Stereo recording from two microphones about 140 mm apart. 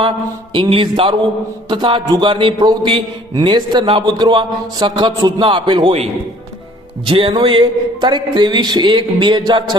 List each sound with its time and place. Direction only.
0.5 s speech: 35° right (ahead or behind)